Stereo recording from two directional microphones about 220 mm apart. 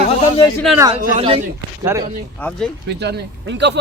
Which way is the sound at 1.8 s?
10° right (ahead or behind).